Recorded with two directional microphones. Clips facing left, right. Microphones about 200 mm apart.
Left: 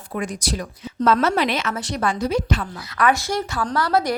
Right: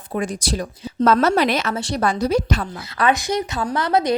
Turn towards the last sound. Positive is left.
turn(degrees=-20)  # may be behind; listen again after turning